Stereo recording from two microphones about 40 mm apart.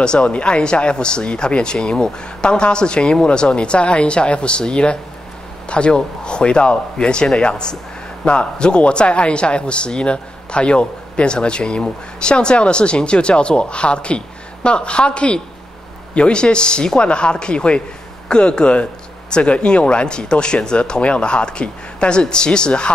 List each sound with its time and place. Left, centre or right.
0.0 s speech: left